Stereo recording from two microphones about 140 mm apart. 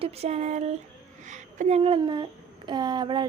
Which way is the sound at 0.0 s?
50° right (ahead or behind).